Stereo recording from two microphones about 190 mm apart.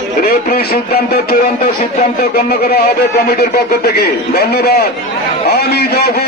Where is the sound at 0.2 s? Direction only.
50° left (ahead or behind).